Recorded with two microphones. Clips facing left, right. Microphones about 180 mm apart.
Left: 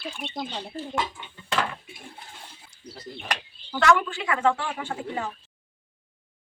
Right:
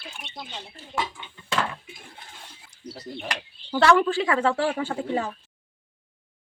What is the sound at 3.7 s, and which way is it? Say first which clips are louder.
Speech: right 3 dB; 30° right (ahead or behind).